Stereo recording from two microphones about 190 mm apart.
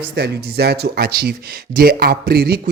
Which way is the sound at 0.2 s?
60° right (ahead or behind).